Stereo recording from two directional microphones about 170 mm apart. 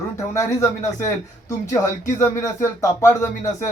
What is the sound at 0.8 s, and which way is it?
Speech, 45° left (ahead or behind).